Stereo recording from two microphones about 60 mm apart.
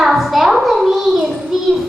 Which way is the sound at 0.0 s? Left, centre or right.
Centre.